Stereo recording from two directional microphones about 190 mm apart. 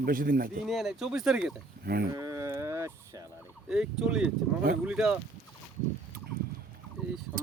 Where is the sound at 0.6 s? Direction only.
Centre (ahead or behind).